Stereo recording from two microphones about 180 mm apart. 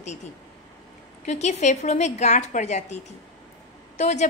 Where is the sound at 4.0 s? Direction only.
40° left (ahead or behind).